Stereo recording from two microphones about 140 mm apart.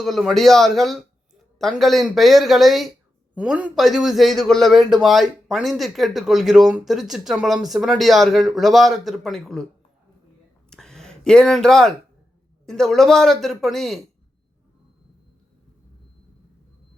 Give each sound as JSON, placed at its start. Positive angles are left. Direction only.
{"t": 0.0, "sound": "a man's voice", "side_deg": 0}
{"t": 10.7, "sound": "a sound", "side_deg": 5}
{"t": 12.6, "sound": "a man's voice", "side_deg": 5}